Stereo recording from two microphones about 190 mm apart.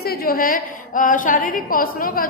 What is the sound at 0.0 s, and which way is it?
A woman's voice, 55° left (ahead or behind).